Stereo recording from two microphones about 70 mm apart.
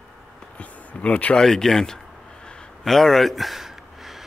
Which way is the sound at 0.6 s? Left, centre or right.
Centre.